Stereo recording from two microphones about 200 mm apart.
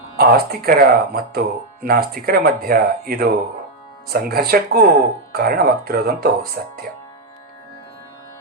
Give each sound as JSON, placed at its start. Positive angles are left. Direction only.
{"t": 0.2, "sound": "speech", "side_deg": -50}